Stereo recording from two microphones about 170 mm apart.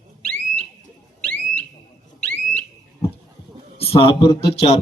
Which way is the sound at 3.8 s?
35° left (ahead or behind).